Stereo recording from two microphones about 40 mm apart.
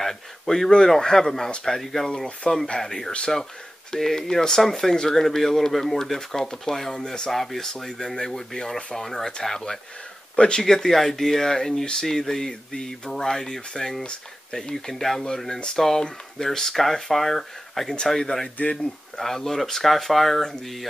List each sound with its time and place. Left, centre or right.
0.0 s speech: centre
7.2 s speech: centre
10.3 s speech: left
10.6 s speech: centre